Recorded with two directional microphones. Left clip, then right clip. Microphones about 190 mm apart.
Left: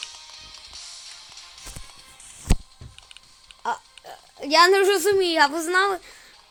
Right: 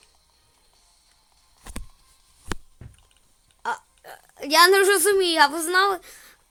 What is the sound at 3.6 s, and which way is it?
A woman's voice, 10° left (ahead or behind).